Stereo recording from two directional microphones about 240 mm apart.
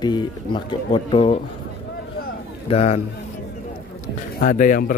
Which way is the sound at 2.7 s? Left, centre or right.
Left.